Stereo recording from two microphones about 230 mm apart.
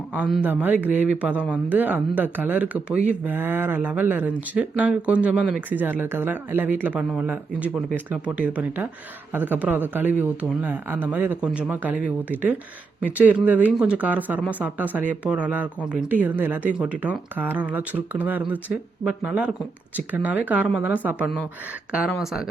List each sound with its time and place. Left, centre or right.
0.2 s speech: centre